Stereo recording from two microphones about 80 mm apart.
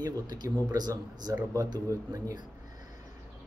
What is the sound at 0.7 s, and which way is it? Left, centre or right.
Speech, right.